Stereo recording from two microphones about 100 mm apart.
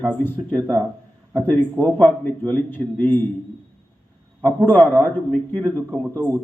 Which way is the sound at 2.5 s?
20° left (ahead or behind).